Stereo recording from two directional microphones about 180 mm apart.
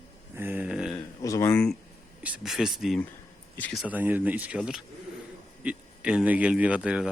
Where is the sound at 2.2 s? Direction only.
5° right (ahead or behind).